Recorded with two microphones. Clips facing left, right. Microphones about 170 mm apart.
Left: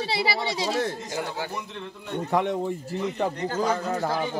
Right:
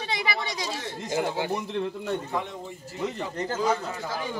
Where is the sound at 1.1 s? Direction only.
25° right (ahead or behind).